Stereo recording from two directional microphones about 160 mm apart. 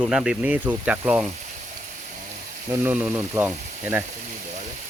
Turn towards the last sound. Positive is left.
turn(degrees=-10)  # may be behind; listen again after turning